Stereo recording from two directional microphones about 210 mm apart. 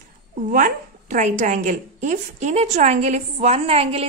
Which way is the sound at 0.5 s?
40° right (ahead or behind).